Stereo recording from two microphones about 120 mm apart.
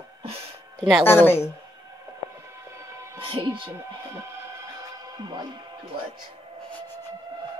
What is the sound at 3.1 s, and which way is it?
Speech, 45° right (ahead or behind).